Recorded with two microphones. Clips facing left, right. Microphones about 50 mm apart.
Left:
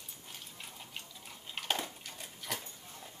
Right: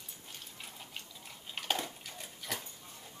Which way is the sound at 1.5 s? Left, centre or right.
Centre.